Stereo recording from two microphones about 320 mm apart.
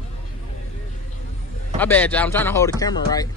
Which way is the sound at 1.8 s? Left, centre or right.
Centre.